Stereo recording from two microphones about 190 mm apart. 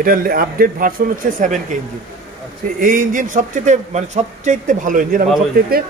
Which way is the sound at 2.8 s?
45° right (ahead or behind).